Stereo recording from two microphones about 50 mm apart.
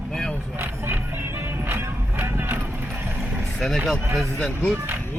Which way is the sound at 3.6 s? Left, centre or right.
Centre.